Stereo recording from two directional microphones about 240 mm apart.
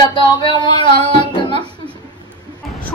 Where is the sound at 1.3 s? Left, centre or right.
Centre.